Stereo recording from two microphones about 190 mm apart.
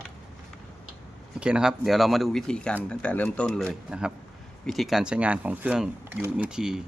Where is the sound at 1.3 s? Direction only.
5° right (ahead or behind).